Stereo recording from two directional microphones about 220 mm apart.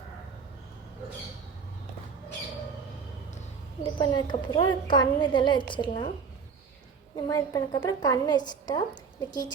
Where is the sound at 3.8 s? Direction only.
20° left (ahead or behind).